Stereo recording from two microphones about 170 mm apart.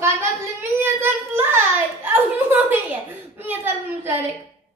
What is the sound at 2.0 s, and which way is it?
A child's voice, 10° right (ahead or behind).